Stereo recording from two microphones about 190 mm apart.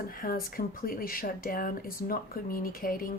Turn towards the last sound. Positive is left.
turn(degrees=50)  # may be behind; listen again after turning